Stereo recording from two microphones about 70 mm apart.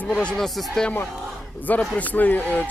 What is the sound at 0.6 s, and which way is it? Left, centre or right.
Speech, centre.